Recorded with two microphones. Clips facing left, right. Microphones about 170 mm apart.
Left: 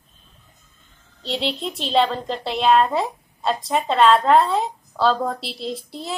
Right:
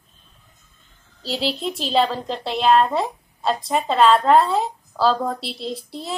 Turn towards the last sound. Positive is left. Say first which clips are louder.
# even
turn(degrees=0)  # may be behind; listen again after turning